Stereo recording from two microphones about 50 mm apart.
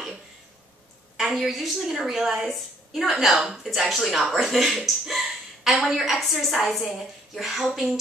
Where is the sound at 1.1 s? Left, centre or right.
Centre.